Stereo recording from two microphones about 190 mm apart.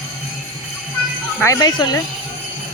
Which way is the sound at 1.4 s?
20° left (ahead or behind).